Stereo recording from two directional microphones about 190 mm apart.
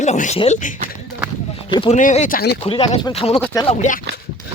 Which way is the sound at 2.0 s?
40° left (ahead or behind).